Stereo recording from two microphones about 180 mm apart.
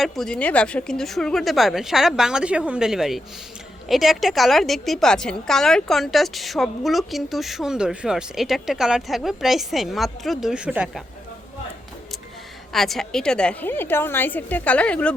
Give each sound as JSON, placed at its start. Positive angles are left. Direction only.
{"t": 0.0, "sound": "a woman's voice", "side_deg": 5}
{"t": 12.7, "sound": "a woman's voice", "side_deg": 0}